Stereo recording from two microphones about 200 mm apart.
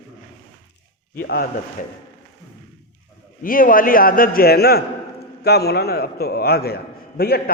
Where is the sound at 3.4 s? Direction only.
45° left (ahead or behind).